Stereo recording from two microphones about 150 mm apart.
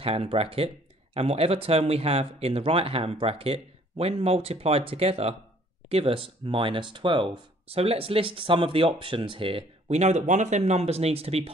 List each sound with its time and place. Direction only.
0.0 s speech: 40° right (ahead or behind)